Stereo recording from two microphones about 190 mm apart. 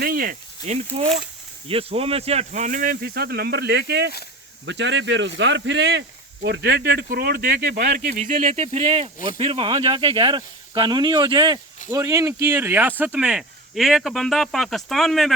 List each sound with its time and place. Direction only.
0.0 s speech: 50° right (ahead or behind)
0.6 s speech: 35° right (ahead or behind); by 15.4 s centre (ahead or behind)